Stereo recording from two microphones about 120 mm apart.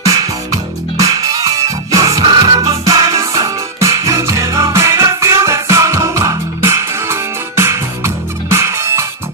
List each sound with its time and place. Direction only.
0.0 s music: 30° right (ahead or behind)